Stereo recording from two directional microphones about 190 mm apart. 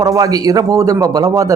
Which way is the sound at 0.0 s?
15° right (ahead or behind).